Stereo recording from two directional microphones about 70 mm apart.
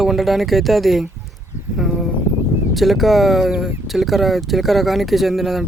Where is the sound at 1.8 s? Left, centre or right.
Centre.